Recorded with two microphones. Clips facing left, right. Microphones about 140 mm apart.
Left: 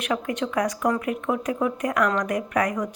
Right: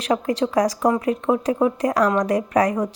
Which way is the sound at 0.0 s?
35° right (ahead or behind).